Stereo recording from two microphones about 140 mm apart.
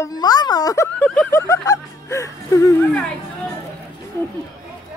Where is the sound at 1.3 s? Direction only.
20° left (ahead or behind).